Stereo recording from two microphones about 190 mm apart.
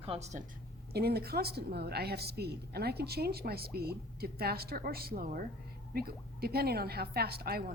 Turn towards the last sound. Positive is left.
turn(degrees=-55)  # may be behind; listen again after turning